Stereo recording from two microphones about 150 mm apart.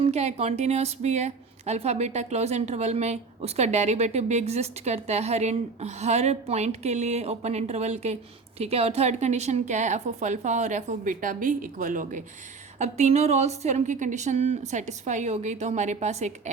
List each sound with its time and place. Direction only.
0.0 s a woman's voice: 45° right (ahead or behind); by 12.2 s 60° right (ahead or behind)
12.8 s a woman's voice: 50° right (ahead or behind)